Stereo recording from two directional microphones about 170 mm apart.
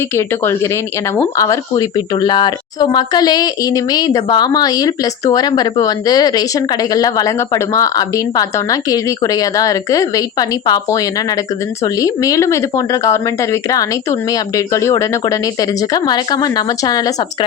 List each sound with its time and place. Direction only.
0.2 s speech: 15° left (ahead or behind)